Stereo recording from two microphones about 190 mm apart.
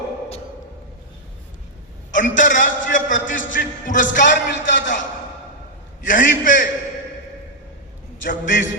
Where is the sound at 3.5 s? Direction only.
45° left (ahead or behind).